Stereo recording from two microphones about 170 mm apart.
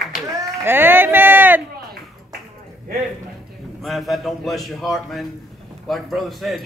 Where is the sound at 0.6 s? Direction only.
15° right (ahead or behind).